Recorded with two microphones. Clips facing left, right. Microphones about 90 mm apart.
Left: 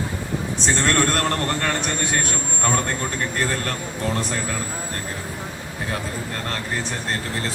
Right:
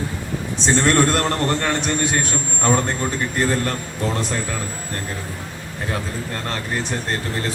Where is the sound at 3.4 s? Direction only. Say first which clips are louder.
Right 5 dB; 20° right (ahead or behind).